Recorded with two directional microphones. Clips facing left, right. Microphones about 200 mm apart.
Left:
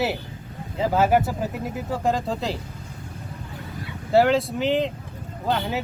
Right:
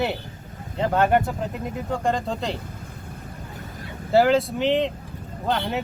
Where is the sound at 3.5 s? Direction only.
45° right (ahead or behind).